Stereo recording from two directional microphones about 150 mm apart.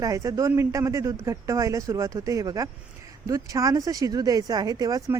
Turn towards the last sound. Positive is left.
turn(degrees=-25)  # may be behind; listen again after turning